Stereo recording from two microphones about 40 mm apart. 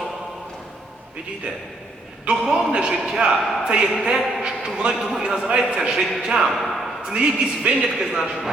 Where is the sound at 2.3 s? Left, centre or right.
Right; by 6.5 s centre.